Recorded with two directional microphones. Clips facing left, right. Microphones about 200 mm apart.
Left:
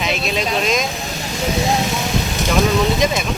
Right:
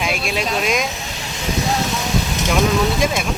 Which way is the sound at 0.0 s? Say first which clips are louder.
Left 1 dB; 10° right (ahead or behind).